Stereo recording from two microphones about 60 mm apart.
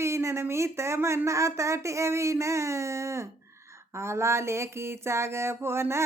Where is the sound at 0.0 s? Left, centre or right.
Right.